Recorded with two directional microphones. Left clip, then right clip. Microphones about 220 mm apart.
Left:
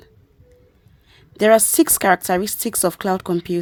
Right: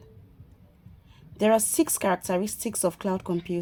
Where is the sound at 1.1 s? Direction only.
45° left (ahead or behind).